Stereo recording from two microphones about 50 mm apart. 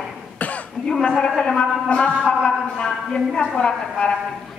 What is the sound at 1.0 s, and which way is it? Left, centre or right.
Speech, centre.